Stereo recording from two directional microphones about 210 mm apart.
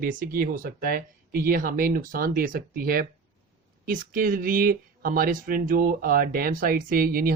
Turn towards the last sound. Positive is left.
turn(degrees=-45)  # may be behind; listen again after turning